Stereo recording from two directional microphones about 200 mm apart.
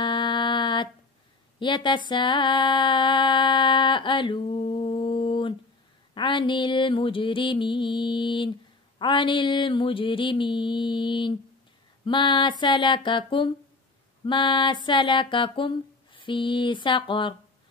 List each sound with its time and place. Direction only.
0.0 s mantra: 25° left (ahead or behind)
1.6 s music: 25° left (ahead or behind)